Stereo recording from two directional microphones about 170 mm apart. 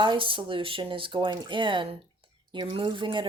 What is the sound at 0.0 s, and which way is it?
Speech, 30° right (ahead or behind).